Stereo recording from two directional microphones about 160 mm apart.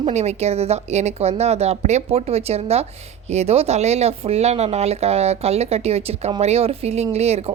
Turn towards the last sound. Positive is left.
turn(degrees=-40)  # may be behind; listen again after turning